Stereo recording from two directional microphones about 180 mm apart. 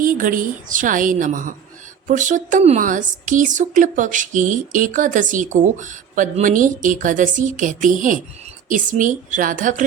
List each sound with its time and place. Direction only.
0.0 s a woman's voice: 50° right (ahead or behind)